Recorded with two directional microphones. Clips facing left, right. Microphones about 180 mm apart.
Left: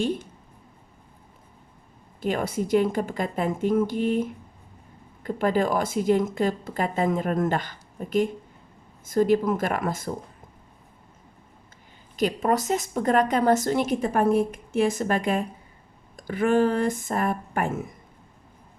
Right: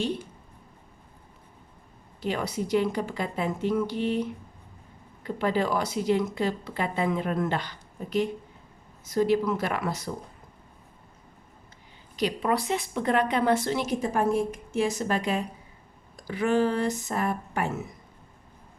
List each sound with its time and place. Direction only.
2.2 s a woman's voice: 50° left (ahead or behind)
12.1 s a woman's voice: 45° left (ahead or behind)